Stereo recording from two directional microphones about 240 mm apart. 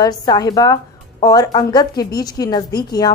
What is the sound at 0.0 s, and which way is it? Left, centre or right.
A woman's voice, centre.